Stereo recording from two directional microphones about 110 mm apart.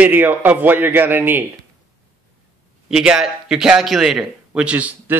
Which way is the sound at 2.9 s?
5° right (ahead or behind).